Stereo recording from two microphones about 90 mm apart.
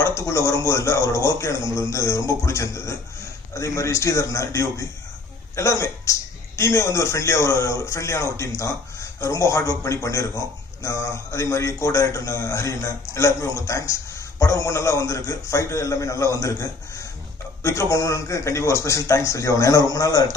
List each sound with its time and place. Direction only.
0.0 s speech: 35° left (ahead or behind)